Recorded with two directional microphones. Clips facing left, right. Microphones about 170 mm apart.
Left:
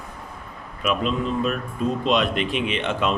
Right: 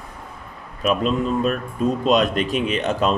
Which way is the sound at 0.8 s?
40° right (ahead or behind).